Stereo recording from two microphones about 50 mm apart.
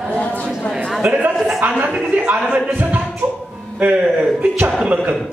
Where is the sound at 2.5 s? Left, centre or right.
Right.